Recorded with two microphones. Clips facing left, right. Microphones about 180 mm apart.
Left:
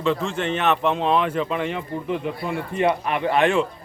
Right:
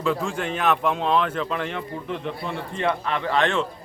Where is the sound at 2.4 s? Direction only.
15° left (ahead or behind).